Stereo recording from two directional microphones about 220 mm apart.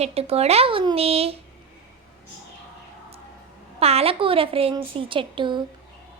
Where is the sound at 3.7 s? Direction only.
25° right (ahead or behind).